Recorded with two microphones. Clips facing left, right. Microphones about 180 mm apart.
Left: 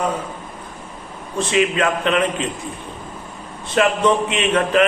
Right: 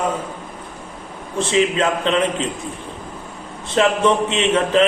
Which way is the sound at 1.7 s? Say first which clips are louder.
Even; 25° right (ahead or behind).